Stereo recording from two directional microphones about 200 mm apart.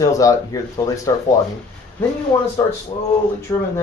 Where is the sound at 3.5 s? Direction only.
20° left (ahead or behind).